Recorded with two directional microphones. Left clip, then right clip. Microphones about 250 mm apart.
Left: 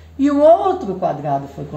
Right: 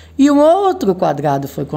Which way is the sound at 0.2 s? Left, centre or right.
Right.